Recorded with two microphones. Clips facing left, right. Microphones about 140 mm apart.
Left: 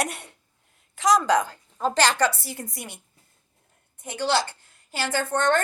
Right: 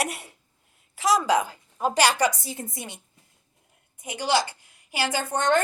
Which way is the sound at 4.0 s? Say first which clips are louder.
Even; 10° right (ahead or behind).